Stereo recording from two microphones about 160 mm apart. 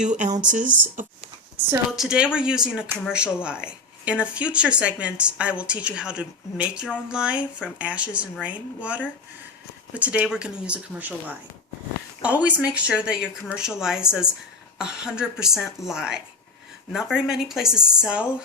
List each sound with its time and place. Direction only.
0.0 s speech: 50° right (ahead or behind)
2.0 s speech: 5° right (ahead or behind)